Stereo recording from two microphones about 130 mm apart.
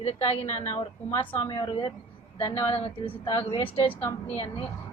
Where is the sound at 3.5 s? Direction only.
35° left (ahead or behind).